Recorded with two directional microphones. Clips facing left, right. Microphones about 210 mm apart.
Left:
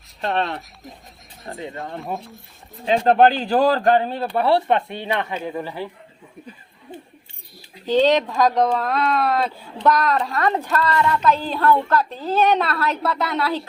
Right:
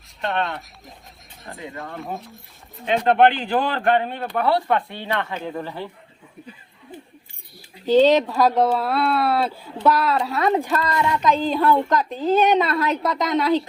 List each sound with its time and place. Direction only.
1.5 s speech: centre (ahead or behind)
2.8 s speech: 35° left (ahead or behind); by 5.9 s 10° left (ahead or behind)
7.9 s speech: 10° right (ahead or behind)